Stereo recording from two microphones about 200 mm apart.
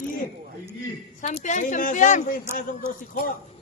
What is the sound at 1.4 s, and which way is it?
Speech, 40° left (ahead or behind).